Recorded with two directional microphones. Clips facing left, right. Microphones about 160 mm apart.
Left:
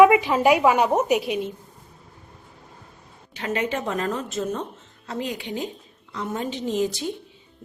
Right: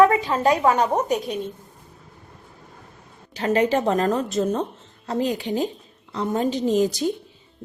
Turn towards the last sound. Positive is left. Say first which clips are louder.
# right 4 dB
turn(degrees=-40)  # may be behind; listen again after turning